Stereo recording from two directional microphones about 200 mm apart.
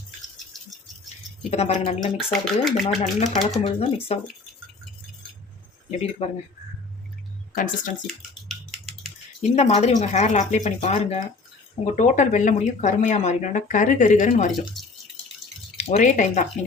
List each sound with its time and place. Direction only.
1.4 s speech: 30° left (ahead or behind)
2.1 s speech: centre (ahead or behind)
3.6 s speech: 30° left (ahead or behind)
5.9 s speech: 30° left (ahead or behind)
7.5 s speech: 40° left (ahead or behind)
9.4 s speech: 35° left (ahead or behind)
14.8 s drip: centre (ahead or behind)
15.7 s speech: 35° left (ahead or behind)